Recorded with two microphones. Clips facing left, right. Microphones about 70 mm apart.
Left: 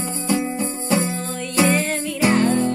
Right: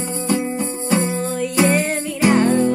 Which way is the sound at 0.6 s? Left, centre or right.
Right.